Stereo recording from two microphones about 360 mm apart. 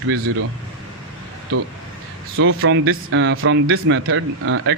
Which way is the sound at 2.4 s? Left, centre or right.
Right.